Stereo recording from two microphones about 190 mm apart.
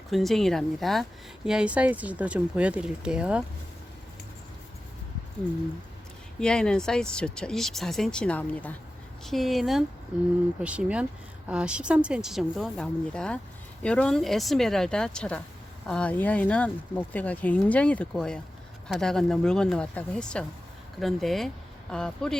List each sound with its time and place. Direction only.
0.1 s speech: centre (ahead or behind)
6.4 s speech: 5° left (ahead or behind)